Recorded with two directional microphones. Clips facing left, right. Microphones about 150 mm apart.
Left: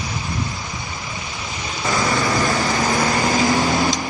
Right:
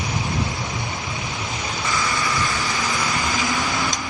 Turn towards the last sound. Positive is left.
turn(degrees=45)  # may be behind; listen again after turning